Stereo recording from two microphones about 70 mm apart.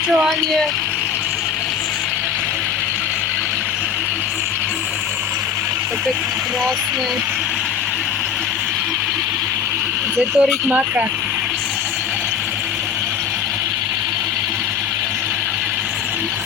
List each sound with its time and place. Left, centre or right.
10.2 s speech: centre